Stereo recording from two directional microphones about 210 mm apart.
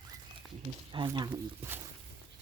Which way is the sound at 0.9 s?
20° right (ahead or behind).